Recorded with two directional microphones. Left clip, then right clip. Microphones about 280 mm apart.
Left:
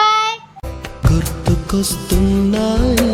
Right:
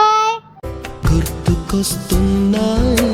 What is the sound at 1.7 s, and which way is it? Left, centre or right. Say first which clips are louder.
Music: left 1 dB; centre.